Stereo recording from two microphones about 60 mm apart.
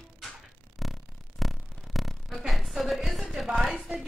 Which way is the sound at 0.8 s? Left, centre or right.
Centre.